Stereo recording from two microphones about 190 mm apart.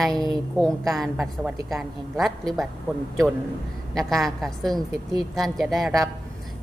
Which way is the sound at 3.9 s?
Centre (ahead or behind).